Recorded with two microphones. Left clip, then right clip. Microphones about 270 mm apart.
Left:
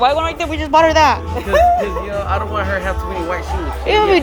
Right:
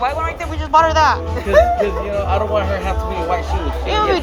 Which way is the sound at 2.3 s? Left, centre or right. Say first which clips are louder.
Right 1 dB; centre.